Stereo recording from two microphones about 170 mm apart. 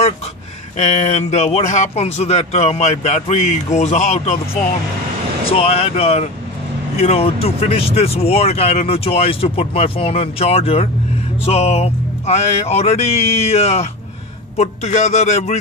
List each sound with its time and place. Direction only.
0.7 s speech: 40° left (ahead or behind)
5.5 s speech: 35° left (ahead or behind)